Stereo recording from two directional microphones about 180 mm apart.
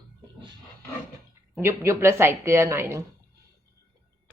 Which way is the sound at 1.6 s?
15° right (ahead or behind).